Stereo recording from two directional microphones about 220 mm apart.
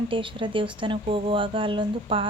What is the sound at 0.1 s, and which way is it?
A woman's voice, 25° right (ahead or behind).